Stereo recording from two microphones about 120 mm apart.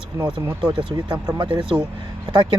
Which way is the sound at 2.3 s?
40° right (ahead or behind).